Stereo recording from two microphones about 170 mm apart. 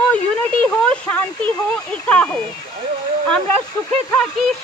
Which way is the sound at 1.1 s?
10° left (ahead or behind).